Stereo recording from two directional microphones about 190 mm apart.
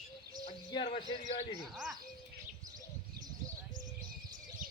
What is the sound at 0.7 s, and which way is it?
Speech, 25° left (ahead or behind).